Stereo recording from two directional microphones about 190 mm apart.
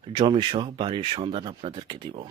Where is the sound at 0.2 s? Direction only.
25° right (ahead or behind).